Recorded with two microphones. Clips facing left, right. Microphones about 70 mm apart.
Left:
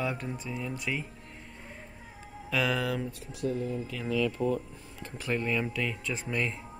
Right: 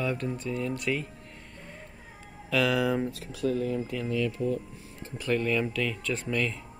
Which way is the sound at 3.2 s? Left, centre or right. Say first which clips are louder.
Right 3 dB; right.